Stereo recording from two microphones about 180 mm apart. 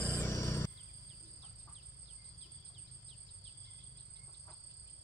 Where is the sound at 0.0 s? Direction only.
15° left (ahead or behind).